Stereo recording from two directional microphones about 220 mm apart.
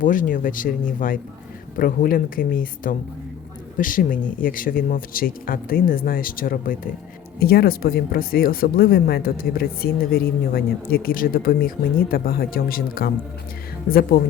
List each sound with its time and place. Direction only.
0.0 s speech: 35° left (ahead or behind)